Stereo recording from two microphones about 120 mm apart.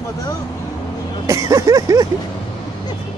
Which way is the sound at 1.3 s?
25° right (ahead or behind).